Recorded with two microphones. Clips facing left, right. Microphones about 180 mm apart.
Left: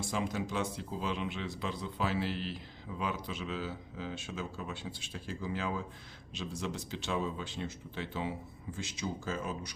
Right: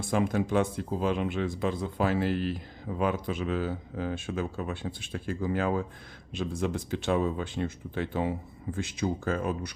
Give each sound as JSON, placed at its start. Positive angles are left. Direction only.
{"t": 0.0, "sound": "speech", "side_deg": -55}